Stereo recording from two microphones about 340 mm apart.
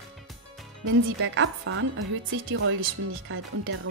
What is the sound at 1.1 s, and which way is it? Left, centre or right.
Speech, right.